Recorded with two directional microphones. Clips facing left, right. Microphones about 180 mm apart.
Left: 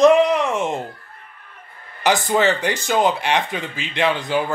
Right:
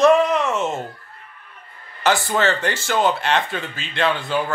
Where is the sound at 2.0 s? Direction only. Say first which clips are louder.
Left 2 dB; 15° left (ahead or behind).